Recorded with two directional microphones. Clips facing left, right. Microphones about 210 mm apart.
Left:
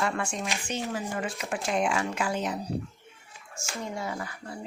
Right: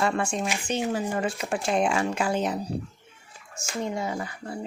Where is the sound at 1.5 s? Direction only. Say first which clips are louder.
Right 3 dB; 30° right (ahead or behind).